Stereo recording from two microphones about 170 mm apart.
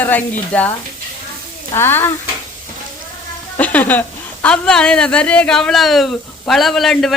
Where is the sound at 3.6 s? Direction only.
10° left (ahead or behind).